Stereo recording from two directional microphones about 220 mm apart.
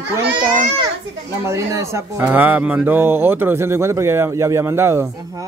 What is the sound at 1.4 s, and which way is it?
Speech, 10° right (ahead or behind).